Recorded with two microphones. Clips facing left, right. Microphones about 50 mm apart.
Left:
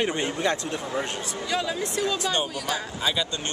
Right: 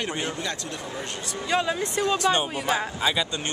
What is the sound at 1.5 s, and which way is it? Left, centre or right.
Speech, right.